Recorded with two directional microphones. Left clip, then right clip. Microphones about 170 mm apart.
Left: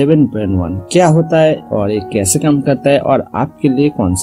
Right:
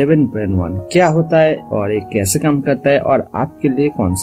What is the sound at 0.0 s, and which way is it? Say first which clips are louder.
Speech: left 2 dB; 35° left (ahead or behind).